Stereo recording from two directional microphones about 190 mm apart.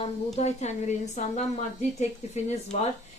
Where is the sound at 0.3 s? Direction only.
35° left (ahead or behind).